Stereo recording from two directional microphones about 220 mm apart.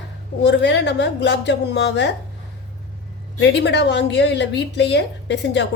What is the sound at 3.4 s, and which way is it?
A woman's voice, 50° left (ahead or behind).